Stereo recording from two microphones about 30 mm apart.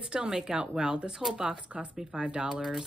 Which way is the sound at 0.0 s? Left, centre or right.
Right.